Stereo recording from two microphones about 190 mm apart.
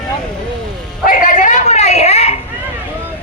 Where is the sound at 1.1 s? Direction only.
45° left (ahead or behind).